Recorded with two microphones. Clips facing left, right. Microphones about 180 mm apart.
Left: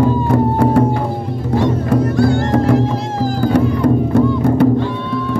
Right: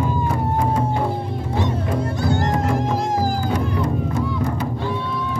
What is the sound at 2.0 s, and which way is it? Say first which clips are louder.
Music: left 8 dB; 20° right (ahead or behind).